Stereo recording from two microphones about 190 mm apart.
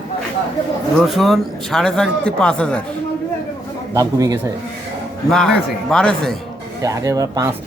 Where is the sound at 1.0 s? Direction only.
Centre (ahead or behind).